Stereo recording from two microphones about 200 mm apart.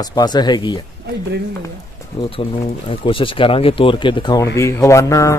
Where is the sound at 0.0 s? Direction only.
20° left (ahead or behind).